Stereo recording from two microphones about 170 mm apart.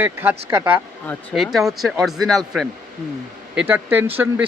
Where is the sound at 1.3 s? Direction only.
Centre (ahead or behind).